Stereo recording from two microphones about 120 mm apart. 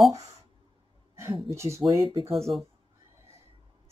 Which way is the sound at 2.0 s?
50° right (ahead or behind).